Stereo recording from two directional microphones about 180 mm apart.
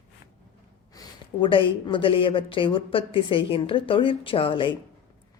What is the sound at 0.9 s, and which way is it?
Speech, 25° left (ahead or behind).